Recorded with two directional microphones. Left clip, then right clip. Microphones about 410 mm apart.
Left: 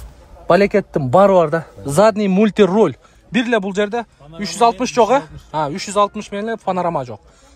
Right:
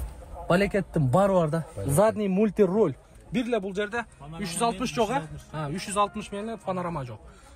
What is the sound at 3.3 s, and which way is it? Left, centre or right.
Speech, left.